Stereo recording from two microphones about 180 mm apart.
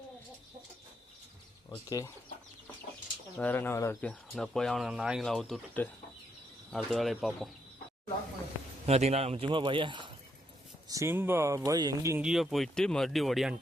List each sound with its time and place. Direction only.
1.7 s speech: 15° left (ahead or behind)
3.3 s speech: 10° left (ahead or behind)
8.9 s speech: 35° right (ahead or behind)
10.8 s speech: 15° right (ahead or behind)
12.2 s speech: centre (ahead or behind)